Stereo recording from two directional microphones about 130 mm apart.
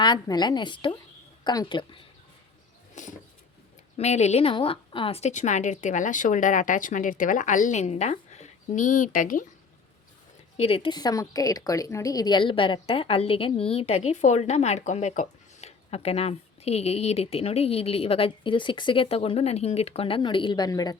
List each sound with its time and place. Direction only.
0.0 s a woman's voice: 35° left (ahead or behind)
2.9 s bird: 70° left (ahead or behind)
3.9 s speech: 55° left (ahead or behind)
5.3 s speech: 70° left (ahead or behind); by 9.5 s 90° left
10.6 s a woman's voice: 45° left (ahead or behind)